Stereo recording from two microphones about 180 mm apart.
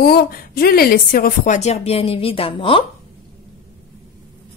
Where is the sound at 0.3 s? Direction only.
55° left (ahead or behind); by 2.8 s 30° left (ahead or behind).